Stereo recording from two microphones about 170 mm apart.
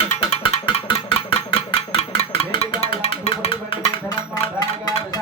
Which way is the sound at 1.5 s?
35° left (ahead or behind).